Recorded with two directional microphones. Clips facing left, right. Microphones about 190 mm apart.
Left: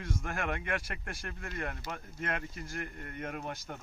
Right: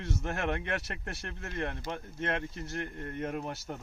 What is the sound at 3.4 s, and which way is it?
Speech, centre (ahead or behind).